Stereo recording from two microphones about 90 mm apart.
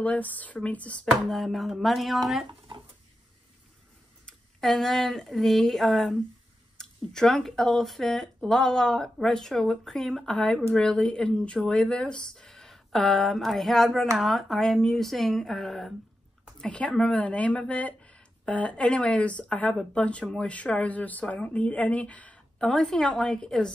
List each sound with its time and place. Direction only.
0.0 s speech: 15° left (ahead or behind)
1.2 s speech: centre (ahead or behind)
4.3 s speech: 5° left (ahead or behind)